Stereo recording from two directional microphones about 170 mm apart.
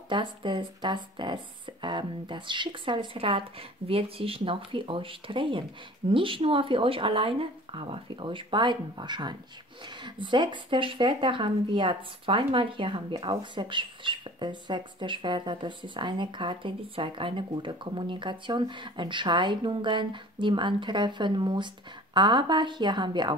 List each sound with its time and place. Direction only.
0.1 s speech: 30° right (ahead or behind)